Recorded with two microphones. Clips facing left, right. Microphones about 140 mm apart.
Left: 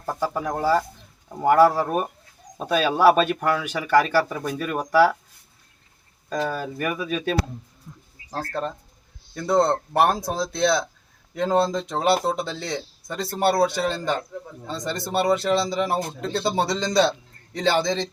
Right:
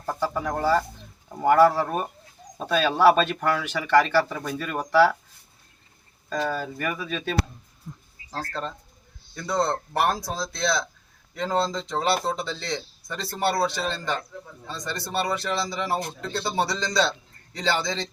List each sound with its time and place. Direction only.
0.0 s bird: 10° left (ahead or behind)
1.3 s speech: 10° left (ahead or behind)
6.3 s speech: 10° left (ahead or behind)